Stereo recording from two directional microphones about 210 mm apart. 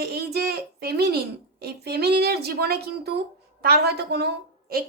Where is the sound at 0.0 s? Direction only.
50° right (ahead or behind).